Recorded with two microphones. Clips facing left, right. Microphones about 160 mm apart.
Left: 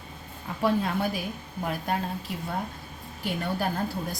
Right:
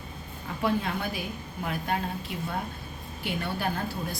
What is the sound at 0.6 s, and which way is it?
Speech, 35° left (ahead or behind).